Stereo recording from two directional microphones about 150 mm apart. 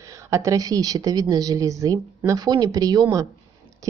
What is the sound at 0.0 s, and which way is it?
Speech, 20° right (ahead or behind).